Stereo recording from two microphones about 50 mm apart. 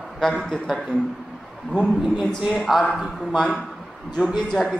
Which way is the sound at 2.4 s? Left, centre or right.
Centre.